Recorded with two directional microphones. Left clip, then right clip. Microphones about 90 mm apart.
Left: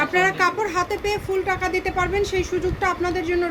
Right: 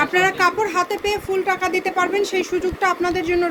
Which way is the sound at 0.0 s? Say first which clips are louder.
Right 2 dB; 45° right (ahead or behind).